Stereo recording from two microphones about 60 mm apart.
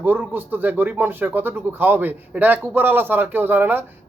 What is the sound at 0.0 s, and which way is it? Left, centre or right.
Speech, right.